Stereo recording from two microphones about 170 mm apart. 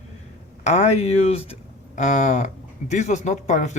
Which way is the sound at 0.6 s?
40° left (ahead or behind).